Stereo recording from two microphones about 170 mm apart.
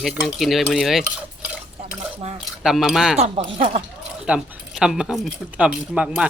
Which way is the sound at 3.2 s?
35° right (ahead or behind).